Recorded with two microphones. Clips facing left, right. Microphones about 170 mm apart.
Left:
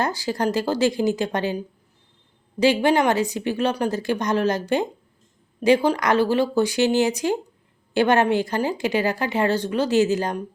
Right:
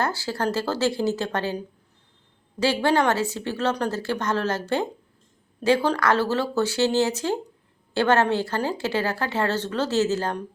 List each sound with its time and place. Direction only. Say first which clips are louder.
0.0 s speech: left 2 dB; 15° left (ahead or behind)